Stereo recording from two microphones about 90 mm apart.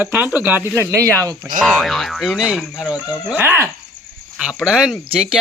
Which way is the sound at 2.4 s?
10° right (ahead or behind).